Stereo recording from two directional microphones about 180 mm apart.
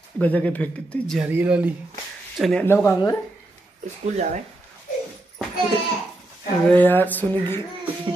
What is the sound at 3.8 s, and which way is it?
Speech, 40° right (ahead or behind).